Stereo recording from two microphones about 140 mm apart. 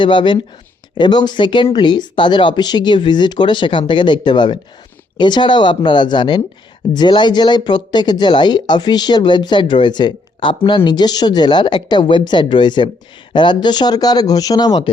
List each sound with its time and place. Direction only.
0.0 s speech: 35° left (ahead or behind)